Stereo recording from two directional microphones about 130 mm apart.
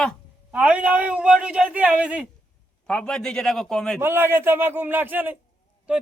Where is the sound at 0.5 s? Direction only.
10° right (ahead or behind).